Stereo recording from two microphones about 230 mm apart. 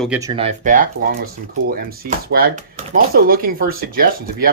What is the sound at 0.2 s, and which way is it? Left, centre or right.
Speech, right.